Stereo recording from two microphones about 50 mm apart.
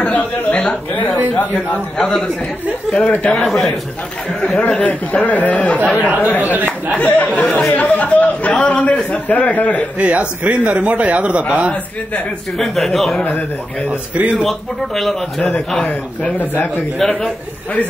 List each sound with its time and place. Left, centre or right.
0.0 s a man's voice: left
2.0 s speech: centre
3.0 s a man's voice: left
3.4 s speech: centre
4.6 s a man's voice: left
5.9 s speech: right
7.0 s a man's voice: left
7.3 s a man's voice: left
9.9 s a man's voice: right
12.5 s speech: centre
13.8 s a man's voice: right
14.4 s speech: centre
17.0 s speech: centre